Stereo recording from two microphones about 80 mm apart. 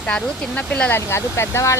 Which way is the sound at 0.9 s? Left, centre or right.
Left.